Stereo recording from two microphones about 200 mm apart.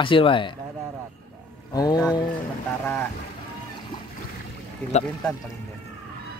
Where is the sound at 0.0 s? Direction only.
25° left (ahead or behind).